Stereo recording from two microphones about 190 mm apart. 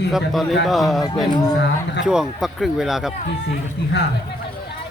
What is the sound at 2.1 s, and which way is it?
Speech, 5° right (ahead or behind).